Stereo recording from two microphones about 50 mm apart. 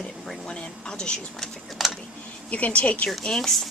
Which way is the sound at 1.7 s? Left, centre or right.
Centre.